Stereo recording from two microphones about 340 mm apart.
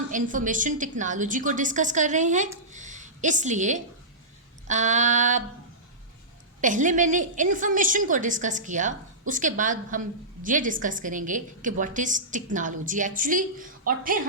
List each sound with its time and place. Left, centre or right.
0.1 s a woman's voice: right
6.6 s a woman's voice: right